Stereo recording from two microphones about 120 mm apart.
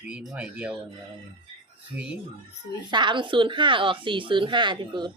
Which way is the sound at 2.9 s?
40° right (ahead or behind).